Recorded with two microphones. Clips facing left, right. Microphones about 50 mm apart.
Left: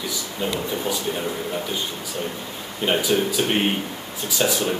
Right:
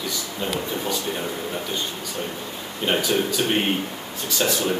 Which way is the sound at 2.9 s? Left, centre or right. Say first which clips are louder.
Left 1 dB; centre.